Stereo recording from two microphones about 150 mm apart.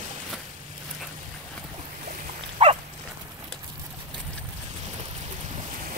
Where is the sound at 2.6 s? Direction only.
40° right (ahead or behind).